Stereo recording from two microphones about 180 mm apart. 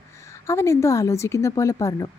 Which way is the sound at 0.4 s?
15° left (ahead or behind).